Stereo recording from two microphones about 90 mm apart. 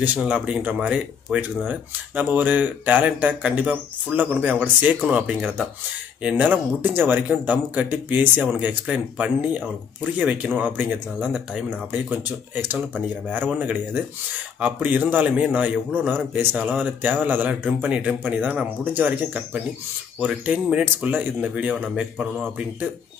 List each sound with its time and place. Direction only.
0.0 s speech: 15° right (ahead or behind)